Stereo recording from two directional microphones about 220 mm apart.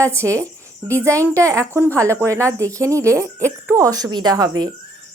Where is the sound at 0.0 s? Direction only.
15° right (ahead or behind).